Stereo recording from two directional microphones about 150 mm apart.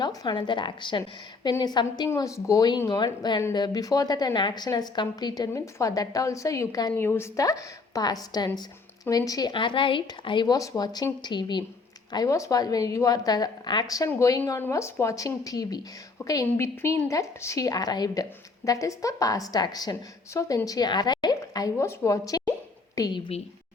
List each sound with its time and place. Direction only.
0.0 s a woman's voice: 25° left (ahead or behind)